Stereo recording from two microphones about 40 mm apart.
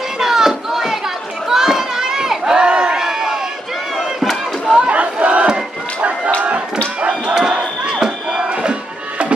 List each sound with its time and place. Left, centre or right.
0.2 s a sound: centre
2.6 s crowd: right
4.2 s crowd: centre
4.7 s battle cry: right
7.0 s a sound: right
7.5 s battle cry: right